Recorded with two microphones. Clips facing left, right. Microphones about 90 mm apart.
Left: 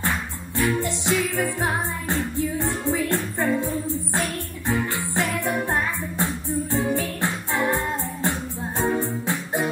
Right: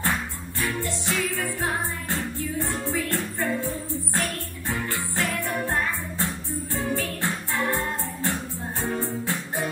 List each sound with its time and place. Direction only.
0.6 s music: 20° left (ahead or behind)